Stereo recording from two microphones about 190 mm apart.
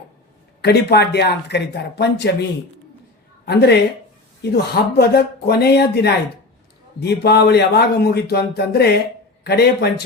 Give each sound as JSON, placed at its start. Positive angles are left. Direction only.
{"t": 0.6, "sound": "a woman's voice", "side_deg": 60}